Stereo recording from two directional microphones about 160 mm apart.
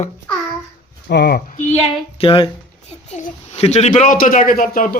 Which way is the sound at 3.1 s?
45° left (ahead or behind).